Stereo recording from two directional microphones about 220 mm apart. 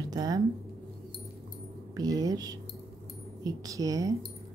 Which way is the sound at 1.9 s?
15° right (ahead or behind).